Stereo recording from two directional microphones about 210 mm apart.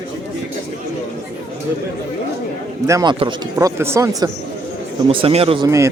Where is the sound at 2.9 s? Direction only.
15° right (ahead or behind).